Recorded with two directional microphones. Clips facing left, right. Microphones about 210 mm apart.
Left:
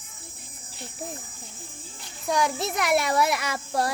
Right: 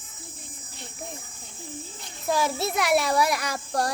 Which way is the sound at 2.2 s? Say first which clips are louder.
Even; 5° right (ahead or behind).